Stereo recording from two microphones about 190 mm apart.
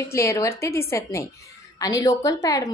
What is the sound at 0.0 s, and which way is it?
A woman's voice, 15° left (ahead or behind).